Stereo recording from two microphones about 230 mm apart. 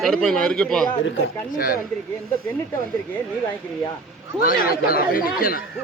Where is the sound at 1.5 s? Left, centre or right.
Left.